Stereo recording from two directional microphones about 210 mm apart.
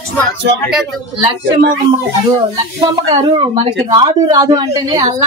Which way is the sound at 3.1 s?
20° right (ahead or behind).